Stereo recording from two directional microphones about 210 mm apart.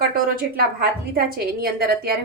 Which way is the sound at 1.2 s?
45° right (ahead or behind).